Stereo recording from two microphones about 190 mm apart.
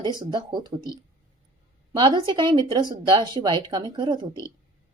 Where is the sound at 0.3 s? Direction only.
20° right (ahead or behind).